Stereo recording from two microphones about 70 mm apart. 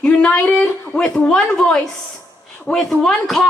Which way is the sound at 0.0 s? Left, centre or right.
Centre.